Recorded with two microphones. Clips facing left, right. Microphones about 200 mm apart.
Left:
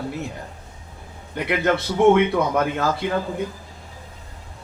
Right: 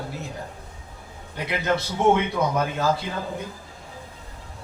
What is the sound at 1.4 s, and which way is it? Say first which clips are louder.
A man's voice: left 4 dB; 55° left (ahead or behind).